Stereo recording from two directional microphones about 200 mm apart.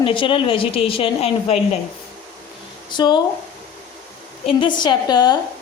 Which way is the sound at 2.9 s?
20° left (ahead or behind).